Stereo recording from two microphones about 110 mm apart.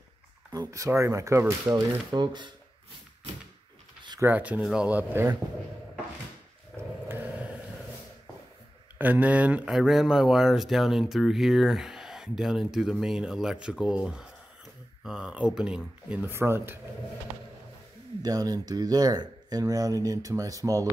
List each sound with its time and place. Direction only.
0.5 s speech: 35° right (ahead or behind)
1.7 s speech: 40° right (ahead or behind)
4.2 s speech: 15° right (ahead or behind)
4.6 s speech: 5° right (ahead or behind)
4.8 s speech: 15° right (ahead or behind)
6.7 s dog: centre (ahead or behind)
7.1 s a sound: 15° right (ahead or behind)
8.9 s speech: 15° right (ahead or behind)
18.2 s speech: 35° right (ahead or behind)